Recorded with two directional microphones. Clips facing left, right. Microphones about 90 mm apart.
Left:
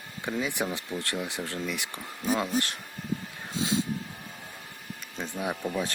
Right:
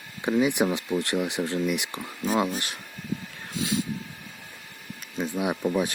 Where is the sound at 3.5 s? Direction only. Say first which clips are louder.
Even; 25° left (ahead or behind).